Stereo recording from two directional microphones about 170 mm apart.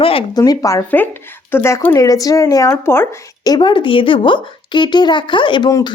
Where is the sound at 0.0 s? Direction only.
35° left (ahead or behind).